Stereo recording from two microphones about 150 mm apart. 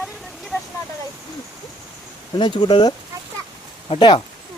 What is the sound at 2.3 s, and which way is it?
Speech, 30° left (ahead or behind).